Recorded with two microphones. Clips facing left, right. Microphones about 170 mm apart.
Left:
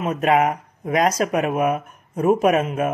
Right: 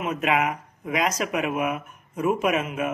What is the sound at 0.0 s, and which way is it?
Speech, 40° left (ahead or behind).